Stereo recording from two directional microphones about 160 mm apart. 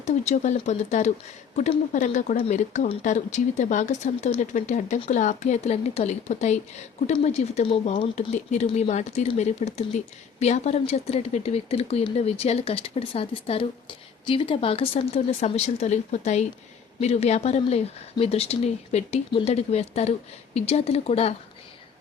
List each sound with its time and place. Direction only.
0.0 s speech: 45° left (ahead or behind)